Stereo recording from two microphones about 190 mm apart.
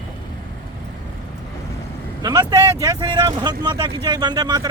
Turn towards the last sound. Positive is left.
turn(degrees=-20)  # may be behind; listen again after turning